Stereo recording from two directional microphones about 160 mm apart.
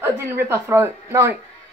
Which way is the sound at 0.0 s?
15° right (ahead or behind).